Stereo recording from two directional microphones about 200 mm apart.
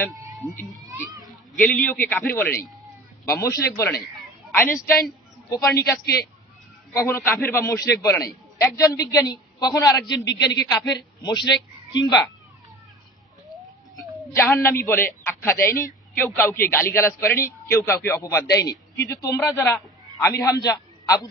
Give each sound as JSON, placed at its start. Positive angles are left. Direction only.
{"t": 0.1, "sound": "a sound", "side_deg": -20}
{"t": 1.6, "sound": "a man's voice", "side_deg": 10}
{"t": 5.8, "sound": "a man's voice", "side_deg": 50}
{"t": 6.9, "sound": "a man's voice", "side_deg": 15}
{"t": 10.1, "sound": "a man's voice", "side_deg": 60}
{"t": 10.7, "sound": "a man's voice", "side_deg": 20}
{"t": 13.9, "sound": "speech", "side_deg": 10}
{"t": 15.6, "sound": "a man's voice", "side_deg": 45}
{"t": 16.2, "sound": "a man's voice", "side_deg": 10}